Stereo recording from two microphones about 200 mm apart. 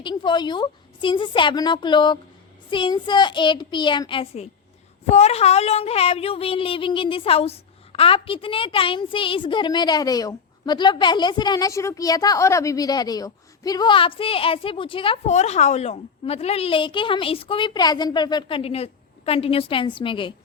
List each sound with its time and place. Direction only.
0.0 s a woman's voice: 25° left (ahead or behind)